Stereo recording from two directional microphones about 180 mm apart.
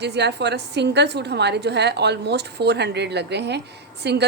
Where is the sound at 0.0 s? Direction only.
70° right (ahead or behind).